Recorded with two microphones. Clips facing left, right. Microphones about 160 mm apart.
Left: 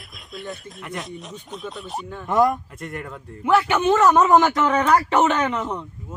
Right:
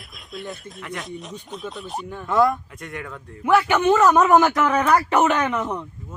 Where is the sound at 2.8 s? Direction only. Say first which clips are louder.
Left 1 dB; centre (ahead or behind).